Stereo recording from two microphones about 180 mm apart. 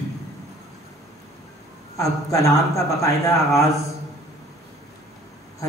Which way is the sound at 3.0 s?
20° left (ahead or behind).